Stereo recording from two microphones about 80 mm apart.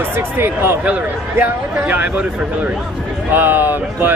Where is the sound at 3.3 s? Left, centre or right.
Right.